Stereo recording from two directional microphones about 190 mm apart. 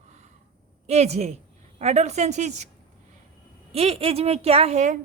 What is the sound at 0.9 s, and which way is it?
A woman's voice, 35° right (ahead or behind).